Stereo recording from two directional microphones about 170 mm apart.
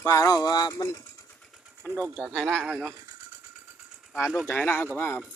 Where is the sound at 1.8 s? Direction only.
10° left (ahead or behind).